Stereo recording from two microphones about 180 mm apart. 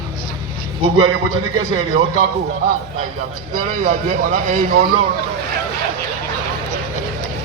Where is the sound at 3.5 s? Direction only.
50° right (ahead or behind).